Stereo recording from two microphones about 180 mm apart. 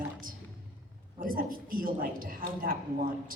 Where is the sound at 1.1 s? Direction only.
50° right (ahead or behind).